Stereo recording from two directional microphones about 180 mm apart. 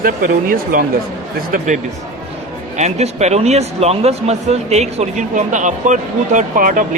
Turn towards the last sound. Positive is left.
turn(degrees=-50)  # may be behind; listen again after turning